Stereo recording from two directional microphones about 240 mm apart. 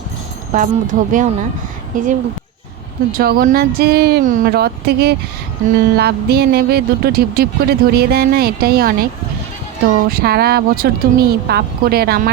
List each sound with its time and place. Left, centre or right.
0.5 s speech: right
3.1 s speech: right
10.1 s speech: right